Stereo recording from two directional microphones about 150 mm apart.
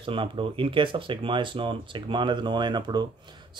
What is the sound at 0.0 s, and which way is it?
A man's voice, 35° right (ahead or behind).